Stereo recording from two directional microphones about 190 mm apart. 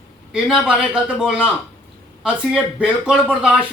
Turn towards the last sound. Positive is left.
turn(degrees=-5)  # may be behind; listen again after turning